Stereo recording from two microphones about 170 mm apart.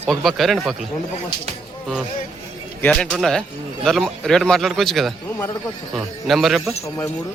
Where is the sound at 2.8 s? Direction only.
5° left (ahead or behind).